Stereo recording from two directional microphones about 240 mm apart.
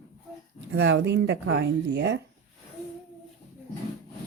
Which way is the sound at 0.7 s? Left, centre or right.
Right.